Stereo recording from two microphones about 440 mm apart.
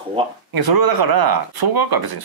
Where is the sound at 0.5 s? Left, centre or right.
Right.